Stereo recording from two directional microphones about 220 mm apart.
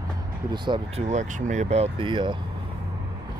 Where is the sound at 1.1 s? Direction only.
35° right (ahead or behind).